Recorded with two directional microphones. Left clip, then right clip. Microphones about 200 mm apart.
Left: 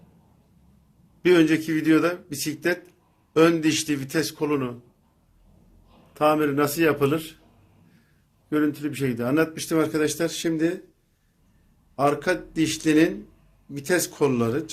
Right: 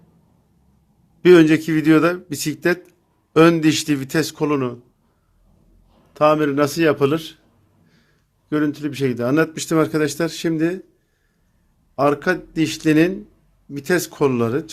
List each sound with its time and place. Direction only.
1.2 s speech: 55° right (ahead or behind)
6.1 s speech: 40° right (ahead or behind)
8.4 s speech: 45° right (ahead or behind)
11.9 s speech: 55° right (ahead or behind)